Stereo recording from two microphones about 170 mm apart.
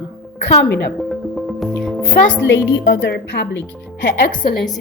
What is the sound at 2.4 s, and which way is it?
A woman's voice, 90° left.